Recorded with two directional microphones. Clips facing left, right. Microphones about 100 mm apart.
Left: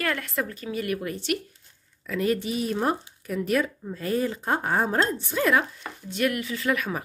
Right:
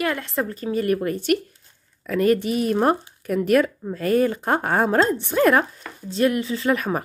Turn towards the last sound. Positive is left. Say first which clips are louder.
# right 5 dB
turn(degrees=-35)  # may be behind; listen again after turning